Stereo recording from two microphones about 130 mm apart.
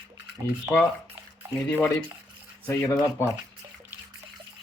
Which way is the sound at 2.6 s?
20° left (ahead or behind).